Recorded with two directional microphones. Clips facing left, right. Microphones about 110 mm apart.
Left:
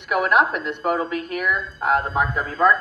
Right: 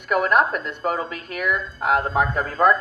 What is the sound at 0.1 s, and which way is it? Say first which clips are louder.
Speech: even; 45° right (ahead or behind).